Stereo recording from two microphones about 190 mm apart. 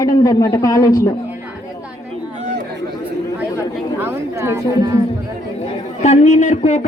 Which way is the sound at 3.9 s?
15° right (ahead or behind).